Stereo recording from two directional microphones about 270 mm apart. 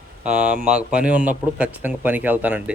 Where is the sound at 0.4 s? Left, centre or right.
Centre.